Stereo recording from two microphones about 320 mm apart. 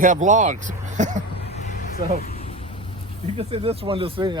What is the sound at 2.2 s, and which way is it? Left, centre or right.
Vehicle, left.